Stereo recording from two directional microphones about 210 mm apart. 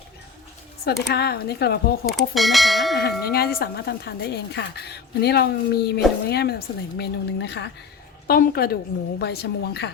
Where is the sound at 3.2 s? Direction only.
45° left (ahead or behind).